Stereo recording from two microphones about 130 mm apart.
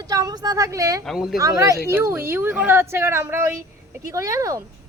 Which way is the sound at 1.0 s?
5° right (ahead or behind).